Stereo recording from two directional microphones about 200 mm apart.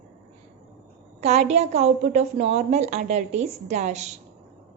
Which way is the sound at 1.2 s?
35° right (ahead or behind).